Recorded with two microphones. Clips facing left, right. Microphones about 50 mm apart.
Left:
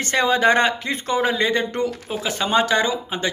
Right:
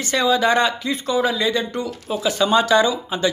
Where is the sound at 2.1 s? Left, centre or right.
Left.